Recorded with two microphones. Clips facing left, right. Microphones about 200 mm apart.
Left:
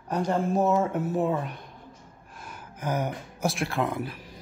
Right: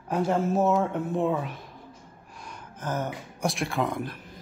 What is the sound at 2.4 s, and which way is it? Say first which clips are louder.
Gasp: left 2 dB; 10° left (ahead or behind).